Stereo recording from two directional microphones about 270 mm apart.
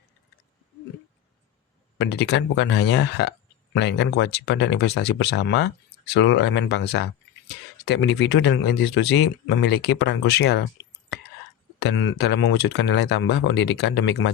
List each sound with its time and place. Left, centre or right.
2.0 s speech: left
11.8 s speech: left